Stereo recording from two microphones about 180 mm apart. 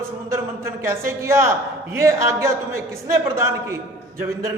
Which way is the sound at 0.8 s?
15° right (ahead or behind).